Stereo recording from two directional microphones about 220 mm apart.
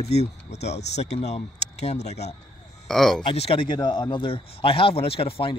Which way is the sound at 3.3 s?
25° left (ahead or behind).